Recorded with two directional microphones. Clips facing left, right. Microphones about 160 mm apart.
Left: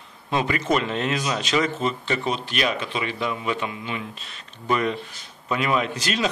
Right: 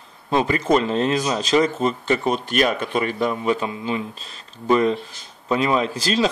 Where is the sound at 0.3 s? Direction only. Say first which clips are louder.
Right 4 dB; 30° right (ahead or behind).